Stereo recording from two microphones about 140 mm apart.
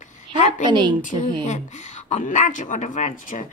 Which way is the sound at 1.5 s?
55° left (ahead or behind).